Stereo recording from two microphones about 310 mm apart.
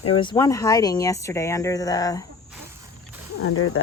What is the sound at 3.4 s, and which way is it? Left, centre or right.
Speech, left.